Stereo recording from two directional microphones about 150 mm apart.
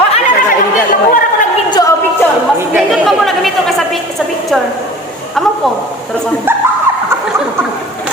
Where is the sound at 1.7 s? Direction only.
25° left (ahead or behind).